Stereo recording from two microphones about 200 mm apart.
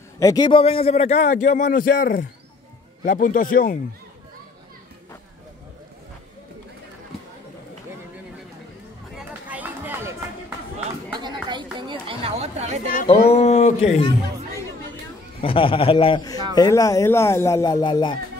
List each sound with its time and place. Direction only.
0.2 s a man's voice: 20° left (ahead or behind); by 3.8 s 45° left (ahead or behind)
9.1 s a sound: 5° right (ahead or behind)
11.4 s chatter: 25° right (ahead or behind)
13.0 s speech: 30° left (ahead or behind)
15.4 s a man's voice: 25° left (ahead or behind)